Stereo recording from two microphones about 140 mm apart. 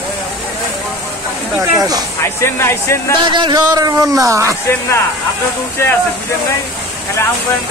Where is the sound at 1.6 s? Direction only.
25° right (ahead or behind).